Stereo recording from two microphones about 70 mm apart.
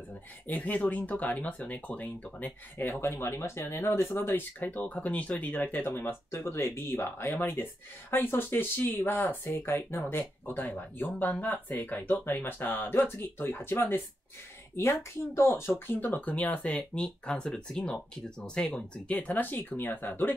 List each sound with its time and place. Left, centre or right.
0.5 s speech: left
2.8 s speech: left